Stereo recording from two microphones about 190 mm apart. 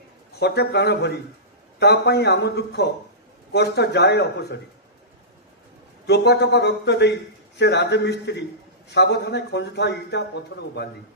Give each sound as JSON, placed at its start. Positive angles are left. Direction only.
{"t": 0.3, "sound": "speech", "side_deg": 60}
{"t": 6.1, "sound": "speech", "side_deg": 60}